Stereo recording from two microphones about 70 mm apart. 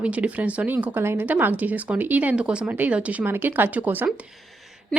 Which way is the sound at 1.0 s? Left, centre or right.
Right.